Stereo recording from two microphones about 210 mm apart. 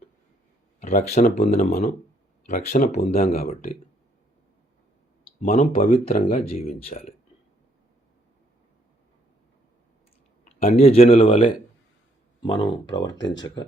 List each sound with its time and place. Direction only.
0.8 s speech: 35° left (ahead or behind)
5.4 s speech: 40° left (ahead or behind)
10.6 s speech: 30° left (ahead or behind)
13.1 s speech: 60° left (ahead or behind)